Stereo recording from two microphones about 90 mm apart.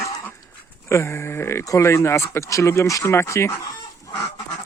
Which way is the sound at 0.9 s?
30° left (ahead or behind).